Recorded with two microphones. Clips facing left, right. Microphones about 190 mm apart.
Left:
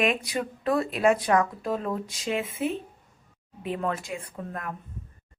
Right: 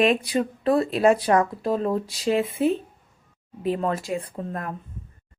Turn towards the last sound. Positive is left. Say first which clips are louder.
# right 5 dB
turn(degrees=-35)  # may be behind; listen again after turning